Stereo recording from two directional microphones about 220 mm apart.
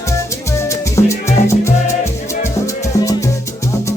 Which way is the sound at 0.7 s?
15° left (ahead or behind).